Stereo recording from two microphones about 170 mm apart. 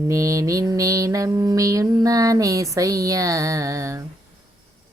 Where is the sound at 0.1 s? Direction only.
20° right (ahead or behind).